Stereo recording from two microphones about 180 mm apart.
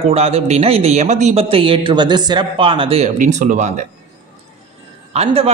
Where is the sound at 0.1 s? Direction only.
35° right (ahead or behind).